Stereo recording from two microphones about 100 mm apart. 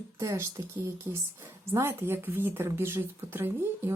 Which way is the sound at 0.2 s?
35° right (ahead or behind).